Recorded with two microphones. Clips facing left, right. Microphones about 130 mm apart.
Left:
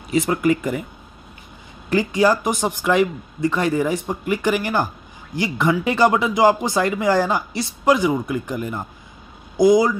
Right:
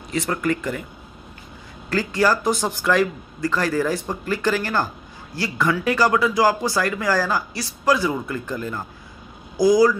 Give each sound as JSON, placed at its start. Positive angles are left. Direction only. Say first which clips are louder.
{"t": 0.3, "sound": "speech", "louder": "left 2 dB", "side_deg": 15}
{"t": 1.9, "sound": "speech", "louder": "left 3 dB", "side_deg": 20}